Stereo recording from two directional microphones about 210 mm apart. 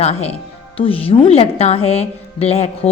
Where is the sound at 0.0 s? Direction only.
30° left (ahead or behind).